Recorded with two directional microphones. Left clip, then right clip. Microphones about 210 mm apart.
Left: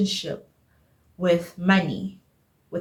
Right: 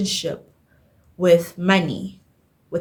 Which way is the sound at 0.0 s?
55° right (ahead or behind).